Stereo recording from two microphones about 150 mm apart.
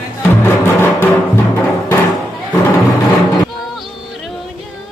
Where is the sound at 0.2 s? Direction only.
15° left (ahead or behind).